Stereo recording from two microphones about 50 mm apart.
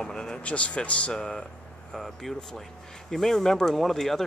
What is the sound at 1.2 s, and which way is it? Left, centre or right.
Speech, centre.